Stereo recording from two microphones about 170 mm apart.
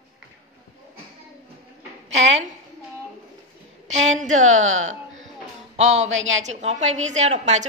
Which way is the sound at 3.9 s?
45° right (ahead or behind).